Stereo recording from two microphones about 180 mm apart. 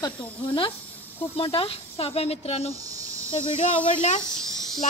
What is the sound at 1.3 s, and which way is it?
Speech, 30° left (ahead or behind).